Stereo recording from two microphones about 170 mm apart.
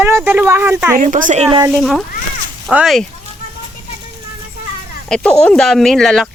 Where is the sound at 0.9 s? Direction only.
50° right (ahead or behind).